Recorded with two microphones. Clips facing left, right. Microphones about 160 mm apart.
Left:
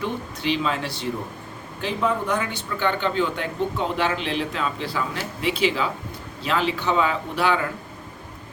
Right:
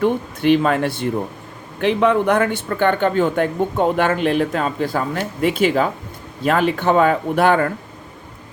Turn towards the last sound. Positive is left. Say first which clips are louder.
# right 7 dB
turn(degrees=-55)  # may be behind; listen again after turning